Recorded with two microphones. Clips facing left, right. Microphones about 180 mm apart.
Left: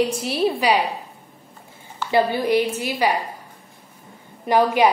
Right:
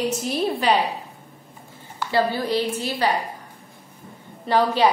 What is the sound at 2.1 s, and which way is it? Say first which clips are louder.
A woman's voice: left 3 dB; 15° left (ahead or behind).